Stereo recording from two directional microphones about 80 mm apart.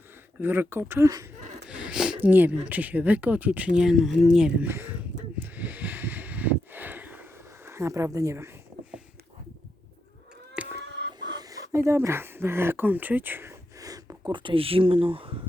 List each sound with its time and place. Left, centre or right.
0.3 s speech: right
1.7 s a sound: centre
2.2 s speech: right
4.6 s snort: right
7.7 s speech: right
10.6 s a sound: centre
11.3 s speech: right
13.7 s a sound: right
14.3 s speech: right